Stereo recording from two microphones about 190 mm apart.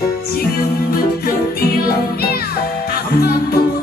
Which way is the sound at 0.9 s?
50° left (ahead or behind).